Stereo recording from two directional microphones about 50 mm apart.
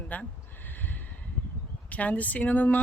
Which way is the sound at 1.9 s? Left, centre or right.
Left.